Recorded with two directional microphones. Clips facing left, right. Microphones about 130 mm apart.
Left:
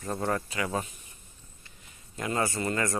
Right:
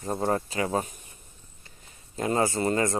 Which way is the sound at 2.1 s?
30° right (ahead or behind).